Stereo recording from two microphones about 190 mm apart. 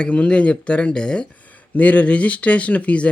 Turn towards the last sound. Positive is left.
turn(degrees=5)  # may be behind; listen again after turning